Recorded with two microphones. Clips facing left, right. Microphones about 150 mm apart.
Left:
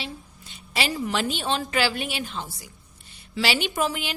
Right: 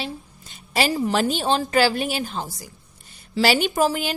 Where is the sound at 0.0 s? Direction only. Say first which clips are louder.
Right 5 dB; 45° right (ahead or behind).